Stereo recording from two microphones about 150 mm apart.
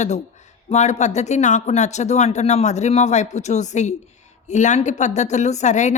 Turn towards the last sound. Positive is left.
turn(degrees=50)  # may be behind; listen again after turning